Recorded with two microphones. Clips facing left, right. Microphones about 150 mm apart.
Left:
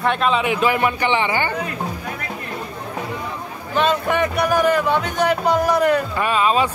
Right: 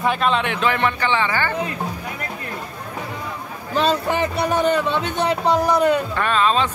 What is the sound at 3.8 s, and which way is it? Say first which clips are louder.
Speech: left 1 dB; 30° right (ahead or behind).